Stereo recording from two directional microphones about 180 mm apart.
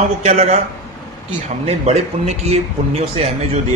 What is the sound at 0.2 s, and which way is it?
Speech, 40° right (ahead or behind).